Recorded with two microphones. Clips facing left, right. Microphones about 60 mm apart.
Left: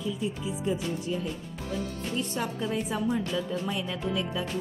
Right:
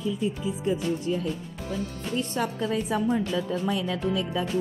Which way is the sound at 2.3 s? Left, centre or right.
Right.